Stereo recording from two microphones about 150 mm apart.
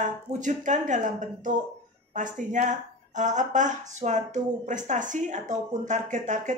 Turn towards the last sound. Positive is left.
turn(degrees=-55)  # may be behind; listen again after turning